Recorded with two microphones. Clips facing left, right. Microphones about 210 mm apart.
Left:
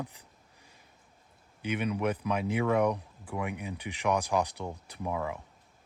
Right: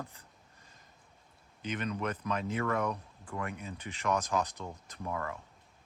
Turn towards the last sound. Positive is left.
turn(degrees=10)  # may be behind; listen again after turning